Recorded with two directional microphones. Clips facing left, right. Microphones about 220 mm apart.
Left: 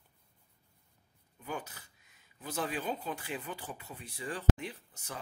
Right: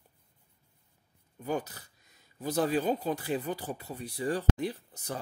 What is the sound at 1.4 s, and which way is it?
Speech, 40° right (ahead or behind).